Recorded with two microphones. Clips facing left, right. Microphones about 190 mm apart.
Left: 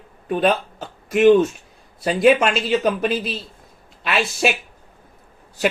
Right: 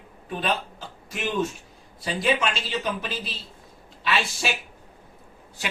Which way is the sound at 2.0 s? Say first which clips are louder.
Left 9 dB; 65° left (ahead or behind).